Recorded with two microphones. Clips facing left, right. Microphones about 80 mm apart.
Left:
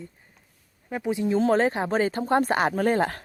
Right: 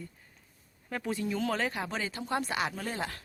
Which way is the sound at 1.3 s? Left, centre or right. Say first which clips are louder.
Left 12 dB; left.